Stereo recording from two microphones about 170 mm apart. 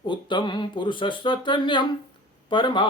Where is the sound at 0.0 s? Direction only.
30° left (ahead or behind).